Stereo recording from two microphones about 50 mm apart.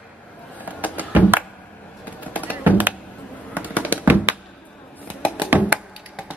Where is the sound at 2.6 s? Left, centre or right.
Right.